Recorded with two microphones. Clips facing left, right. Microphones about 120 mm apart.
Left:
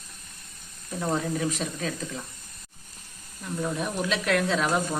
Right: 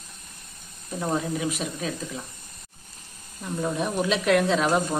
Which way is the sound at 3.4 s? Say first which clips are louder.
Right 2 dB; 15° right (ahead or behind).